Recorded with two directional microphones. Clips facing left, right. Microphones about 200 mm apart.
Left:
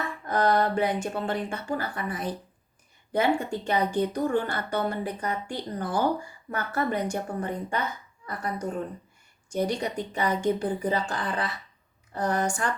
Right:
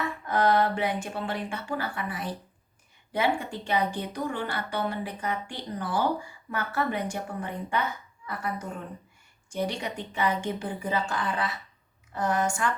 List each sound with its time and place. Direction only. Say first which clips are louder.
0.3 s speech: even; 40° left (ahead or behind)